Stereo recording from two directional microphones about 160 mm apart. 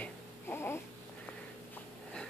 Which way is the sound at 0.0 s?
15° left (ahead or behind).